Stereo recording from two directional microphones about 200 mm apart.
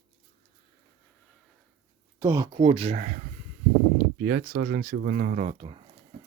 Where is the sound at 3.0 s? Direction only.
40° right (ahead or behind).